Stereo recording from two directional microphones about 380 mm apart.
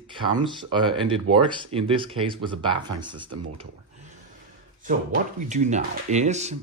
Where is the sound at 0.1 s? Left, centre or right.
Centre.